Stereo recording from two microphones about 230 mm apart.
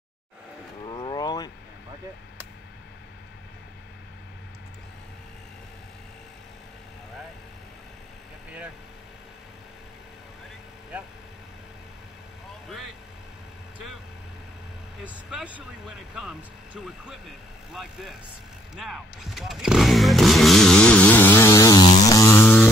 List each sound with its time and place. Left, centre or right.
0.8 s a sound: centre
12.6 s vehicle: centre
15.0 s vehicle: centre
16.2 s speech: centre
18.8 s chainsaw: centre